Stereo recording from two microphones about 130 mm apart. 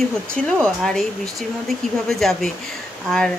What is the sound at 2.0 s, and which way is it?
Speech, centre (ahead or behind).